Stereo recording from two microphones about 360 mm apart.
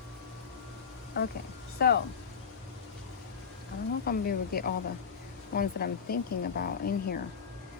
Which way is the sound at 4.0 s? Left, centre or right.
Left.